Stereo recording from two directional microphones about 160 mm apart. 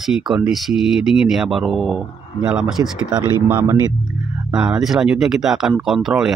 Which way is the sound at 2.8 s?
20° right (ahead or behind).